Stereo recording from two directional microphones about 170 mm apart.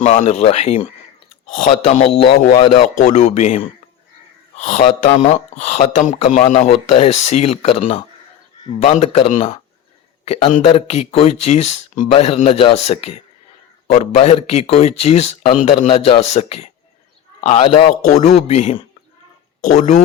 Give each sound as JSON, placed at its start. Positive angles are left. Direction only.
{"t": 0.0, "sound": "speech", "side_deg": 40}